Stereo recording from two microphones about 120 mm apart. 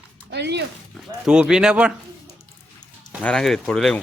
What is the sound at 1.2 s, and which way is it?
Speech, 5° right (ahead or behind).